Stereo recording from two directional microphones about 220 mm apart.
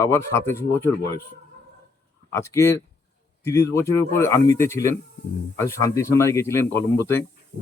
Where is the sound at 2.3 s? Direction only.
15° left (ahead or behind).